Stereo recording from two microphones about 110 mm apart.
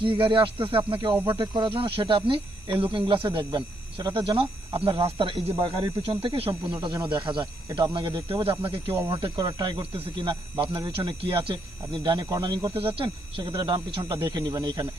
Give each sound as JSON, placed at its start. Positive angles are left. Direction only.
{"t": 0.0, "sound": "speech", "side_deg": -50}
{"t": 6.8, "sound": "speech", "side_deg": -40}
{"t": 9.4, "sound": "speech", "side_deg": -35}
{"t": 9.6, "sound": "speech", "side_deg": -55}
{"t": 12.0, "sound": "speech", "side_deg": -35}
{"t": 12.7, "sound": "speech", "side_deg": -55}
{"t": 13.5, "sound": "speech", "side_deg": -40}
{"t": 13.7, "sound": "speech", "side_deg": -50}